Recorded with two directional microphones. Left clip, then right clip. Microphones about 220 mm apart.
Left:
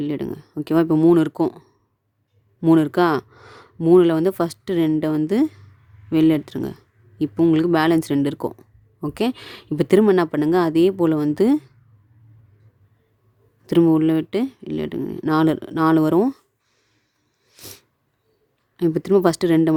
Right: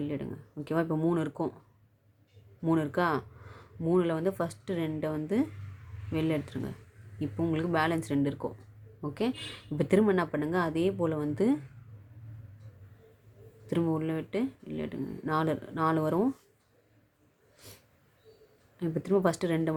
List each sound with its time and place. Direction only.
0.0 s speech: 50° left (ahead or behind)
2.6 s speech: 50° left (ahead or behind)
13.7 s speech: 50° left (ahead or behind)
17.6 s sneeze: 50° left (ahead or behind)
18.8 s speech: 50° left (ahead or behind)